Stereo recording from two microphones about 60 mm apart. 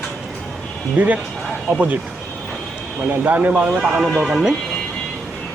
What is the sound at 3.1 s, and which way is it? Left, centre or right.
Speech, right.